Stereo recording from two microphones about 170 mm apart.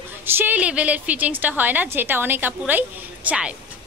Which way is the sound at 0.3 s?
10° right (ahead or behind).